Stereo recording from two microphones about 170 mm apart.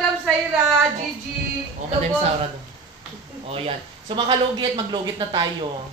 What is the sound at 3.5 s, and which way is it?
Speech, 30° right (ahead or behind).